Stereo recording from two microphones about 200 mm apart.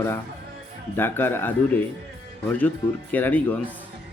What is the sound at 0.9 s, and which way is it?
A man's voice, 10° left (ahead or behind).